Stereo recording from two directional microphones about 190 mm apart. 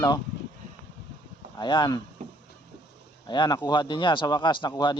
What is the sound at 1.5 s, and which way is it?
Speech, 25° left (ahead or behind).